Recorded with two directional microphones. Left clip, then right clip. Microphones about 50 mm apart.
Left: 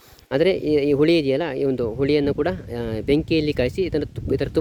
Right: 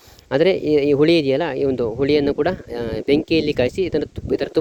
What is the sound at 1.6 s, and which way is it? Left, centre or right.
Speech, left.